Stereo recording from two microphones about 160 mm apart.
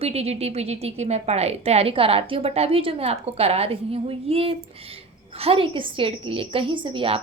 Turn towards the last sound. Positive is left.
turn(degrees=-35)  # may be behind; listen again after turning